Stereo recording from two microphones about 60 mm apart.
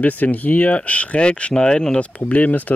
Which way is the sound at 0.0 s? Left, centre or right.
Left.